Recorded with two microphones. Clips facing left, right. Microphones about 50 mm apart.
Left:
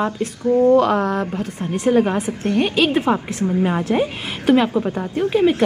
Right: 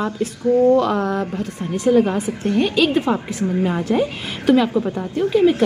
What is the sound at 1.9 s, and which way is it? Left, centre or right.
A woman's voice, centre.